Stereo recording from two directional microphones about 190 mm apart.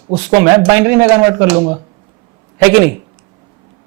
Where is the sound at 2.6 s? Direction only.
10° right (ahead or behind).